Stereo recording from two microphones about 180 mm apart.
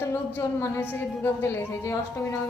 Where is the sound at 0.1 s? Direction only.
15° left (ahead or behind).